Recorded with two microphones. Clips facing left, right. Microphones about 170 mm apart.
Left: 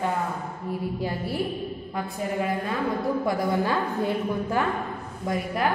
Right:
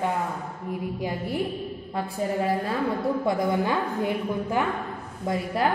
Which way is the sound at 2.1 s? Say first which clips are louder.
Right 2 dB; 35° right (ahead or behind).